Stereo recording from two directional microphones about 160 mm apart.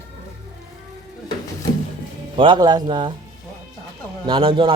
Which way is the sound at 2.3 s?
30° right (ahead or behind).